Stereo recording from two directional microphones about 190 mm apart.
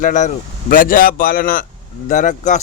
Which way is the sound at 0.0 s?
40° left (ahead or behind).